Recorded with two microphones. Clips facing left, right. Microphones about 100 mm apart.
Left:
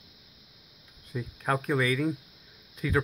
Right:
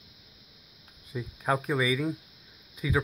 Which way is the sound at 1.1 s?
5° right (ahead or behind).